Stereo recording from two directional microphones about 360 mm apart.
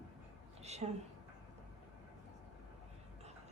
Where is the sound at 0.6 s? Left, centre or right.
Centre.